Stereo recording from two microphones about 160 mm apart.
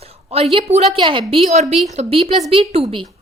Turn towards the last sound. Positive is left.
turn(degrees=-35)  # may be behind; listen again after turning